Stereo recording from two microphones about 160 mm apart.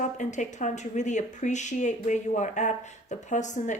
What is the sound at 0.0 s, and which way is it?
A woman's voice, 50° left (ahead or behind).